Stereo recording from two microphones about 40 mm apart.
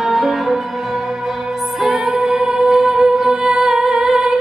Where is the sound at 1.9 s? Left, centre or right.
Centre.